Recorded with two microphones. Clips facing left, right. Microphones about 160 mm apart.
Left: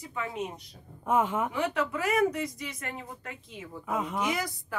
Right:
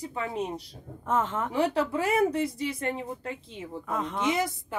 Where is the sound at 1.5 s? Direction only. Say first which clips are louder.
Right 4 dB; 35° right (ahead or behind).